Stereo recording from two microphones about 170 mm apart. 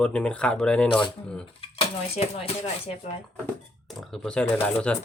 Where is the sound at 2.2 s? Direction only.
35° left (ahead or behind).